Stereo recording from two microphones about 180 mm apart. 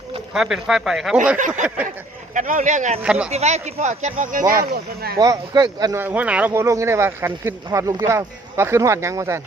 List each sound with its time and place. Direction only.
0.3 s speech: centre (ahead or behind)
1.4 s speech: 45° right (ahead or behind)
3.0 s speech: 5° right (ahead or behind)
3.2 s speech: 40° right (ahead or behind)
4.5 s speech: 60° right (ahead or behind)
5.1 s speech: 20° right (ahead or behind)